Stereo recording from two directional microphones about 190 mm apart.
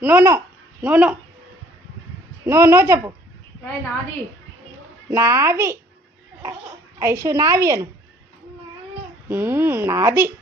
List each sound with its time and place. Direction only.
0.0 s a child's voice: 10° right (ahead or behind)
2.5 s speech: 15° right (ahead or behind)
5.1 s speech: 15° right (ahead or behind)
7.0 s speech: 15° right (ahead or behind)
9.3 s speech: 10° right (ahead or behind)